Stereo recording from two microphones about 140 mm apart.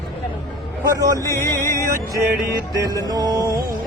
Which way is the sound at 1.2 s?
20° left (ahead or behind).